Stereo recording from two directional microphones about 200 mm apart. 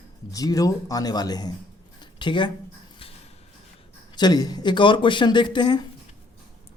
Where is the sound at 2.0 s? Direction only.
25° left (ahead or behind).